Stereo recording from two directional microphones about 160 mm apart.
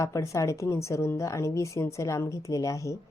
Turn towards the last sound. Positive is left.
turn(degrees=20)  # may be behind; listen again after turning